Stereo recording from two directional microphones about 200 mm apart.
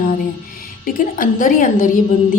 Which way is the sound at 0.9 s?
45° left (ahead or behind).